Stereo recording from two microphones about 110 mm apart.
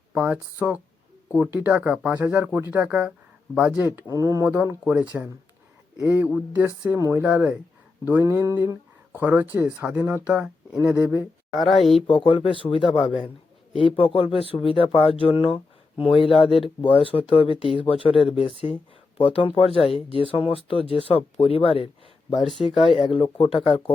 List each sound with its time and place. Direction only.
0.2 s speech: 15° right (ahead or behind)
4.1 s speech: 30° right (ahead or behind)
4.9 s speech: 10° right (ahead or behind)
6.9 s speech: 20° right (ahead or behind)
8.2 s speech: 25° right (ahead or behind)
11.5 s speech: centre (ahead or behind)
12.0 s speech: 55° left (ahead or behind)
22.4 s speech: centre (ahead or behind)
22.8 s speech: 60° left (ahead or behind)